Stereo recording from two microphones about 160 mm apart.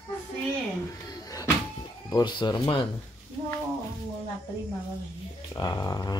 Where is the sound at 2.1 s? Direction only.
25° left (ahead or behind).